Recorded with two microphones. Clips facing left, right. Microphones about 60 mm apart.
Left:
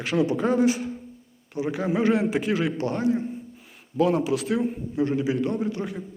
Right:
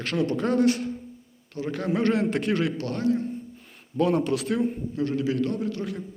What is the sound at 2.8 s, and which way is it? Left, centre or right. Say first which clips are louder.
Speech: left 1 dB; centre.